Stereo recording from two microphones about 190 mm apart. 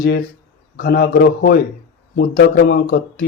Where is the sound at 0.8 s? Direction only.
55° left (ahead or behind).